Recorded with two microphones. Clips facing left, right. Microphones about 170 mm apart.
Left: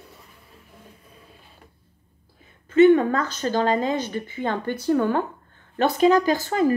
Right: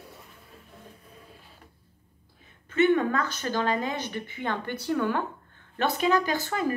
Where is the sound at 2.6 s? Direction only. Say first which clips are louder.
Left 8 dB; 40° left (ahead or behind).